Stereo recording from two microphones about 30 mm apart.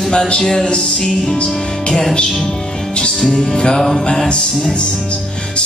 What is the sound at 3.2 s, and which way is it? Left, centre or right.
Music, centre.